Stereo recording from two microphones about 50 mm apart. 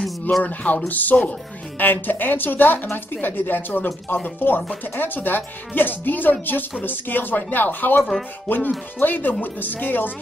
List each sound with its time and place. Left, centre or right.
0.4 s speech: left